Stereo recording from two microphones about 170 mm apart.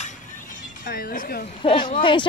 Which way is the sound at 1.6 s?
30° left (ahead or behind).